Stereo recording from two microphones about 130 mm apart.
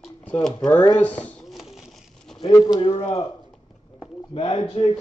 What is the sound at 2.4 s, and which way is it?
Speech, 30° left (ahead or behind).